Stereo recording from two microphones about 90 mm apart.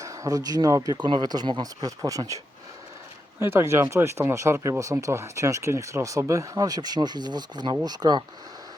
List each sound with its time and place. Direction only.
0.0 s speech: 35° right (ahead or behind)
0.9 s speech: 55° right (ahead or behind); by 2.4 s 40° right (ahead or behind)
3.4 s speech: 30° right (ahead or behind); by 8.2 s 50° right (ahead or behind)